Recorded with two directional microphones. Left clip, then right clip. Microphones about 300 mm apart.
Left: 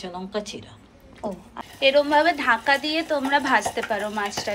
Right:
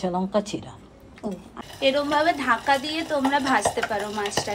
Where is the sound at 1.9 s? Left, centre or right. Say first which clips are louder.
Left 3 dB; centre.